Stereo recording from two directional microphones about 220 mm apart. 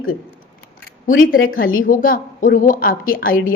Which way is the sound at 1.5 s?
40° left (ahead or behind).